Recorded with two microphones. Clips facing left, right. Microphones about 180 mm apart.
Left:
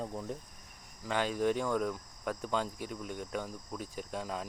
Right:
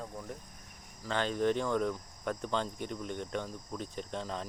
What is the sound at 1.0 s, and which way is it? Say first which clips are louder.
Speech: even; 10° left (ahead or behind).